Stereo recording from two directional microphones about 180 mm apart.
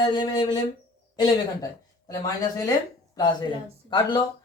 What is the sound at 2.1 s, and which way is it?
Speech, 20° left (ahead or behind).